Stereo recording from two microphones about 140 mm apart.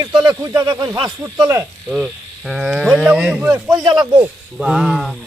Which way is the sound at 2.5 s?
5° right (ahead or behind).